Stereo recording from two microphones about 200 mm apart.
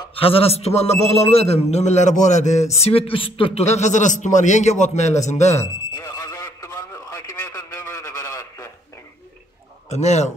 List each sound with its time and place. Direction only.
0.1 s speech: 30° left (ahead or behind)
5.6 s radio: 15° left (ahead or behind)
9.8 s speech: 35° left (ahead or behind)